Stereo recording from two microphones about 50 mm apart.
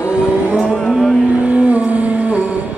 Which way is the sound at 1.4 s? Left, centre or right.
Right.